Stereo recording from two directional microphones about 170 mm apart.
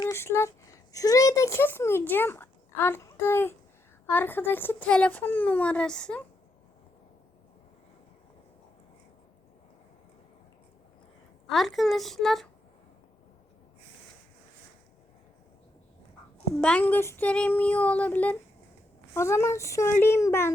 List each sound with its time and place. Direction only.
0.0 s a woman's voice: 15° left (ahead or behind)
11.4 s speech: centre (ahead or behind)
16.6 s a woman's voice: 5° left (ahead or behind)